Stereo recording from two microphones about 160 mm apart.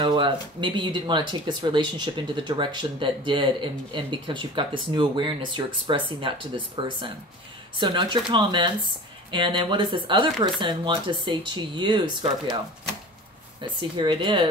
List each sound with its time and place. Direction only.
0.0 s speech: 30° right (ahead or behind)
13.6 s speech: 30° right (ahead or behind)